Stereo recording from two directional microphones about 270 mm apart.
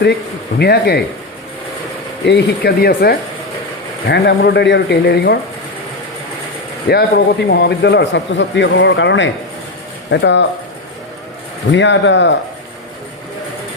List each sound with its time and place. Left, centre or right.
0.6 s a man's voice: left
2.2 s a man's voice: left
6.8 s a man's voice: left
11.7 s a man's voice: left